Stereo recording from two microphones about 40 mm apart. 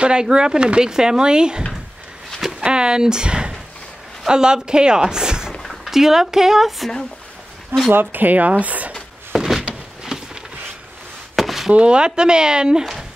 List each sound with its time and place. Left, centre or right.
0.0 s speech: right
2.6 s speech: right
7.9 s speech: right
9.3 s a sound: centre
11.3 s chop: centre
11.7 s speech: right